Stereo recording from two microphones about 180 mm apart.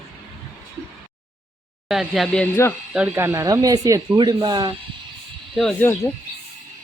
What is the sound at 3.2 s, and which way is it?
Speech, 15° right (ahead or behind).